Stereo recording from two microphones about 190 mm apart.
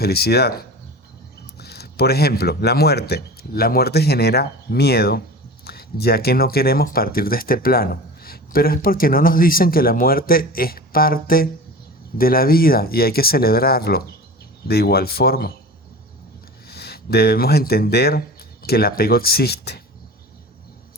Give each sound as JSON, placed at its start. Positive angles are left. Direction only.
{"t": 0.0, "sound": "a man's voice", "side_deg": 55}
{"t": 16.6, "sound": "a man's voice", "side_deg": 55}